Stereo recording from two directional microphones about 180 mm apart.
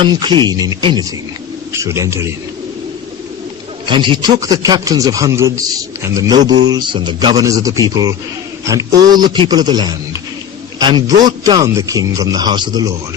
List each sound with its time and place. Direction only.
0.0 s a man's voice: 25° right (ahead or behind)
3.8 s a man's voice: 25° right (ahead or behind)